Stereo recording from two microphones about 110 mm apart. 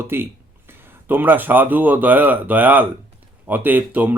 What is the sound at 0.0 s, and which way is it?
Speech, 20° right (ahead or behind).